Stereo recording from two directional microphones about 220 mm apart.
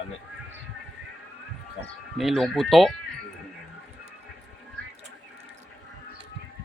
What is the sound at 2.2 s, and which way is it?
Speech, centre (ahead or behind).